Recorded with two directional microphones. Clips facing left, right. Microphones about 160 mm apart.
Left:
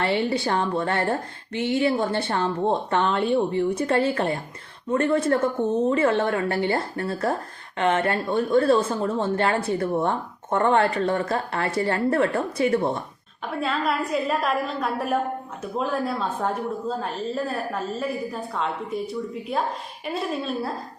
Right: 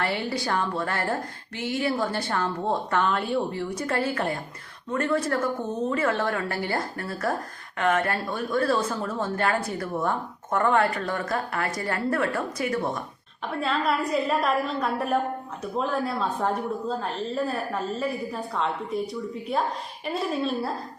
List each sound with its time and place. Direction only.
0.0 s speech: 25° left (ahead or behind)
13.4 s a woman's voice: centre (ahead or behind)